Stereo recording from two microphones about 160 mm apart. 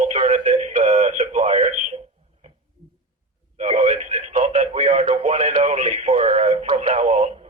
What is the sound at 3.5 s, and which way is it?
Radio, 45° right (ahead or behind).